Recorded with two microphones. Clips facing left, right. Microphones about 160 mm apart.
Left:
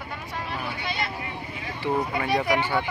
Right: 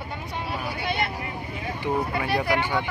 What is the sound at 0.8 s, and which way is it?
Vehicle, 55° right (ahead or behind).